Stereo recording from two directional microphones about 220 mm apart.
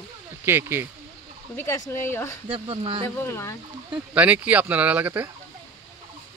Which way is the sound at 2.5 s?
25° right (ahead or behind).